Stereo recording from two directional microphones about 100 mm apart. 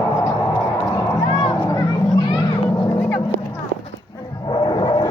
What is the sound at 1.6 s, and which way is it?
Children playing, 35° left (ahead or behind).